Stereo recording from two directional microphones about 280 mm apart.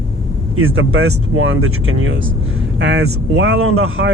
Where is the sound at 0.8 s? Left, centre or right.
Right.